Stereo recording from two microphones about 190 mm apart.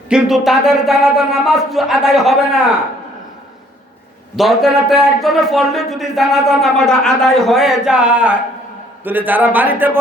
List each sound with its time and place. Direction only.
0.1 s a man's voice: centre (ahead or behind)
4.4 s a man's voice: centre (ahead or behind)